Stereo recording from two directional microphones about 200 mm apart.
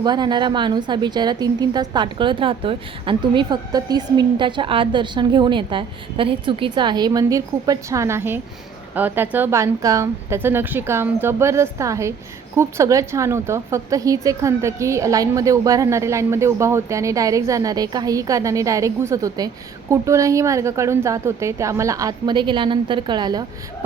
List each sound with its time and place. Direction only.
0.0 s a woman's voice: 20° right (ahead or behind)